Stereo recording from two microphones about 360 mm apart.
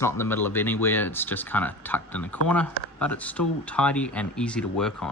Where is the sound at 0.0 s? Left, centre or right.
Centre.